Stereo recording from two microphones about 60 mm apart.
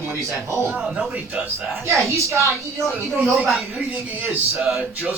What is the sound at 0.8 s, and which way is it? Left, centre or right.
Speech, centre.